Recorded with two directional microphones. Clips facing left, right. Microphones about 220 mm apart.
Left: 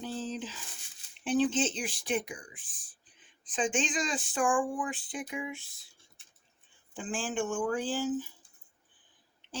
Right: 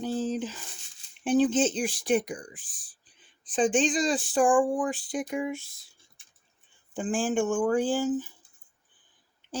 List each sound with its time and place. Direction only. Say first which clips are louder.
0.0 s squish: right 7 dB; 50° right (ahead or behind)
1.2 s speech: right 5 dB; 45° right (ahead or behind)
6.9 s speech: right 7 dB; 45° right (ahead or behind)